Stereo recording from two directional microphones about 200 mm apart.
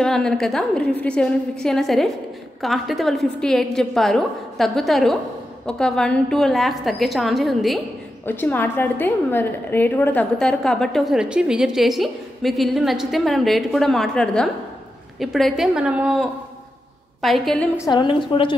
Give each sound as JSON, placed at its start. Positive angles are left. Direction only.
{"t": 0.0, "sound": "a woman's voice", "side_deg": 5}
{"t": 17.7, "sound": "a woman's voice", "side_deg": 20}